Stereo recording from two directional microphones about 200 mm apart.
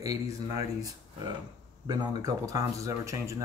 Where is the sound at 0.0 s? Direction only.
15° right (ahead or behind).